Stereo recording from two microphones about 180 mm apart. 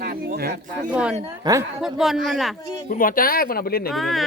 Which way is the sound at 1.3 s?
15° right (ahead or behind).